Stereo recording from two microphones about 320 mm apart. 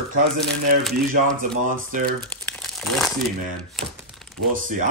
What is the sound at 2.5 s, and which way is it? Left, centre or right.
Crumpling, centre.